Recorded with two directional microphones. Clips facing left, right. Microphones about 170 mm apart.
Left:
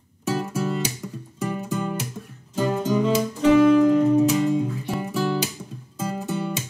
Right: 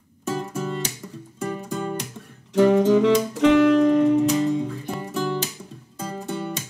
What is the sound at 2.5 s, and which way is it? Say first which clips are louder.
Music: right 7 dB; 80° right.